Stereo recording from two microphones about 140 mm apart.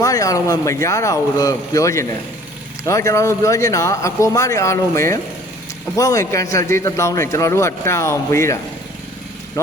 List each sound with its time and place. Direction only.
0.0 s a man's voice: 25° left (ahead or behind)